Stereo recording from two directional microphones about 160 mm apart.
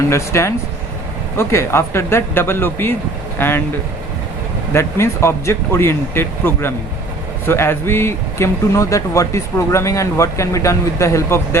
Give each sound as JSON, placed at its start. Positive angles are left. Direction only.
{"t": 0.1, "sound": "speech", "side_deg": 20}
{"t": 4.7, "sound": "speech", "side_deg": 15}